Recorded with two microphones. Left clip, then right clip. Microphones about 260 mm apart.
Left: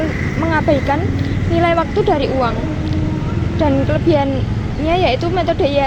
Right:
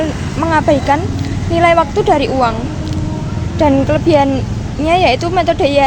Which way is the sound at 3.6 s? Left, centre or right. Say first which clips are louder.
Right 5 dB; right.